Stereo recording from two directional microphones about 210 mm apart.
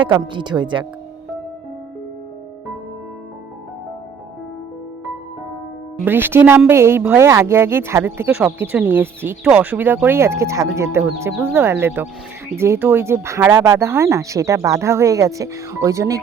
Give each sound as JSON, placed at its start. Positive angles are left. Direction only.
{"t": 0.0, "sound": "speech", "side_deg": -20}
{"t": 6.1, "sound": "speech", "side_deg": -10}